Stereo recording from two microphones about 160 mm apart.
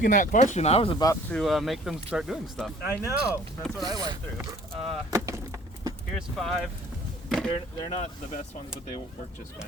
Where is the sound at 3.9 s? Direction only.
25° right (ahead or behind).